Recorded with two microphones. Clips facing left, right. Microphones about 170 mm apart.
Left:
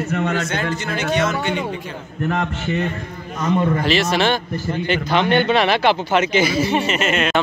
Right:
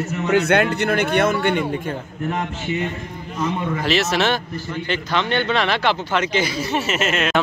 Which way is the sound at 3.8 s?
Centre (ahead or behind).